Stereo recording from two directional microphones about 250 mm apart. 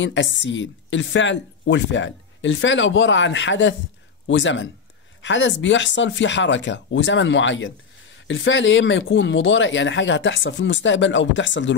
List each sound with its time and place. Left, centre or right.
0.0 s a woman's voice: left